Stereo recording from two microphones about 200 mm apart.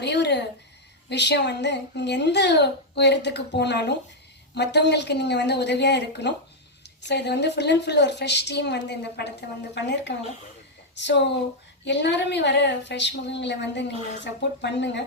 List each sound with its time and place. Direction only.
0.0 s a woman's voice: 60° left (ahead or behind)